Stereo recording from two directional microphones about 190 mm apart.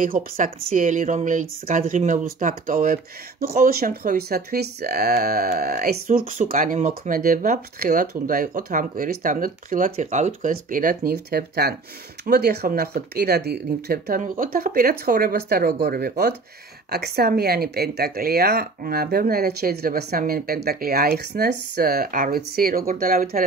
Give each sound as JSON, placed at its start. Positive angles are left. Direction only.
{"t": 0.0, "sound": "speech", "side_deg": -45}